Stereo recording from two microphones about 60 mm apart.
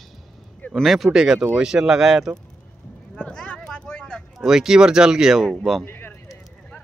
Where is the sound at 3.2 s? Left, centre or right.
Centre.